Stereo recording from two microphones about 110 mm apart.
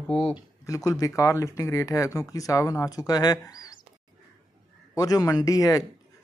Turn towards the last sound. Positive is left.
turn(degrees=35)  # may be behind; listen again after turning